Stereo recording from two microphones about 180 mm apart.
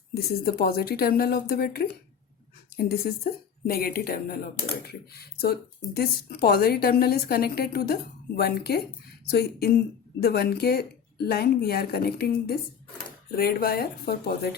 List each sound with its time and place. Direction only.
0.2 s speech: 60° left (ahead or behind)